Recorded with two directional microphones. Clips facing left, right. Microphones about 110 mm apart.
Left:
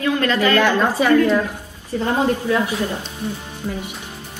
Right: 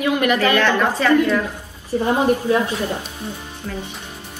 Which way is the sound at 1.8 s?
15° right (ahead or behind).